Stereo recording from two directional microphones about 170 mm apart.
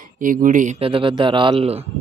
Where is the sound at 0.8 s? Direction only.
30° right (ahead or behind).